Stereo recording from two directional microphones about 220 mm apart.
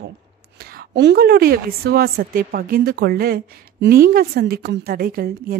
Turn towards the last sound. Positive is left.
turn(degrees=-45)  # may be behind; listen again after turning